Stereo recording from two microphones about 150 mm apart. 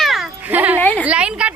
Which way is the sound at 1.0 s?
5° right (ahead or behind).